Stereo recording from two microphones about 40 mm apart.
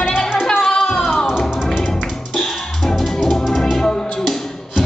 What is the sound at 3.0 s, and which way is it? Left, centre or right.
Music, centre.